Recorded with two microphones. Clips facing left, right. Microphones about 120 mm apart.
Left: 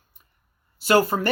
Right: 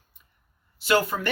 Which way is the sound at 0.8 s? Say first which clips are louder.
Left 4 dB; 40° left (ahead or behind).